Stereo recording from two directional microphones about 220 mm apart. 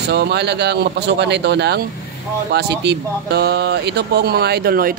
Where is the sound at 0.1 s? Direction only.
50° right (ahead or behind).